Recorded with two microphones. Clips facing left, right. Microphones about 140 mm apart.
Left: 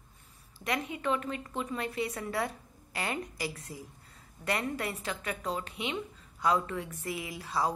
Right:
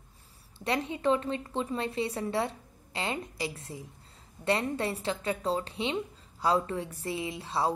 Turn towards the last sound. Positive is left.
turn(degrees=-30)  # may be behind; listen again after turning